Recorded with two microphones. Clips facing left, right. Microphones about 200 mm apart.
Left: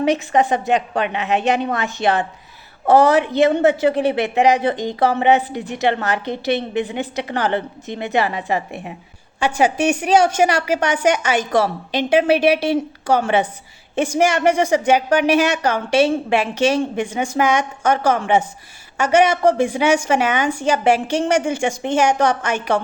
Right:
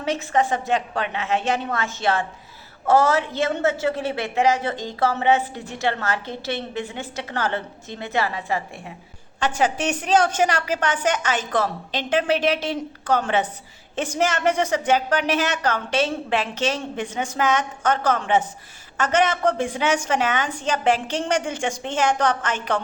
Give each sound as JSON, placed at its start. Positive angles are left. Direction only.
{"t": 0.0, "sound": "a woman's voice", "side_deg": 15}